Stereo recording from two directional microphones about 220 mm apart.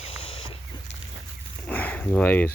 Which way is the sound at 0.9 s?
55° left (ahead or behind).